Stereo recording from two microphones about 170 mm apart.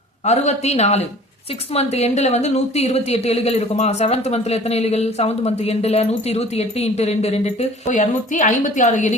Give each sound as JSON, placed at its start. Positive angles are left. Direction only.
{"t": 0.3, "sound": "a woman's voice", "side_deg": 40}